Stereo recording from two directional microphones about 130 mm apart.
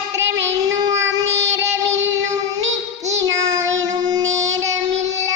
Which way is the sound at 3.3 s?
25° right (ahead or behind).